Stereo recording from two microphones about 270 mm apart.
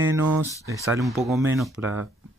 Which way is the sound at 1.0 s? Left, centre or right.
Centre.